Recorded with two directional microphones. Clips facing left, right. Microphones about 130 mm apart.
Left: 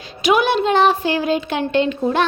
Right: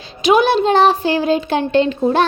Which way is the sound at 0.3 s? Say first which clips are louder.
Right 3 dB; 30° right (ahead or behind).